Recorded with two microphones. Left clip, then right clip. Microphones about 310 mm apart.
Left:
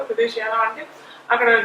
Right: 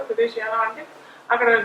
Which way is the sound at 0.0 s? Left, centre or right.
Centre.